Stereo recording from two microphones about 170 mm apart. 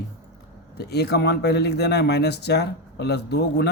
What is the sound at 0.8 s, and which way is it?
Speech, 70° left (ahead or behind).